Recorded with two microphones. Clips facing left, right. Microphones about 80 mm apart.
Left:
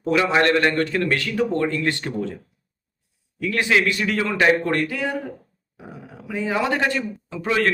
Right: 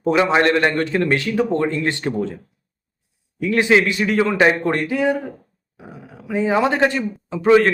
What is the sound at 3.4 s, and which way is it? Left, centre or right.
Speech, right.